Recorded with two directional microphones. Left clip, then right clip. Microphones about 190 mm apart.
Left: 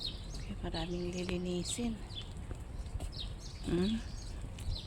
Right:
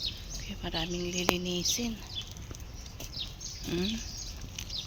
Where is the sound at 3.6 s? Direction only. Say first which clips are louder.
Right 1 dB; 10° left (ahead or behind).